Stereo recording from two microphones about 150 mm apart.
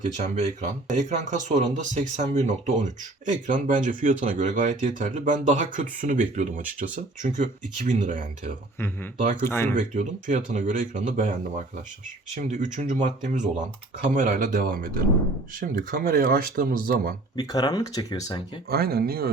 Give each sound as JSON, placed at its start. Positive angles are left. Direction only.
{"t": 0.2, "sound": "speech", "side_deg": -50}
{"t": 8.8, "sound": "speech", "side_deg": 15}
{"t": 9.7, "sound": "speech", "side_deg": -55}
{"t": 17.3, "sound": "speech", "side_deg": 25}
{"t": 18.7, "sound": "speech", "side_deg": -90}